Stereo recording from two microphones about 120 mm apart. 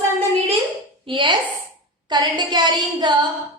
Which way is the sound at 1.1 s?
40° right (ahead or behind).